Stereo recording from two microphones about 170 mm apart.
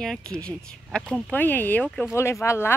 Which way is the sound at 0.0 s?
5° left (ahead or behind).